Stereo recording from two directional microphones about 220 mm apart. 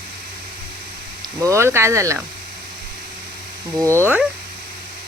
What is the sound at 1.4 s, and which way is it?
Speech, 10° right (ahead or behind).